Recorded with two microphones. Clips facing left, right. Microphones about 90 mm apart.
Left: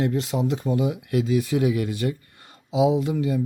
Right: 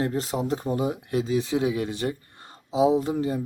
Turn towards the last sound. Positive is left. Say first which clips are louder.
# left 1 dB
turn(degrees=-35)  # may be behind; listen again after turning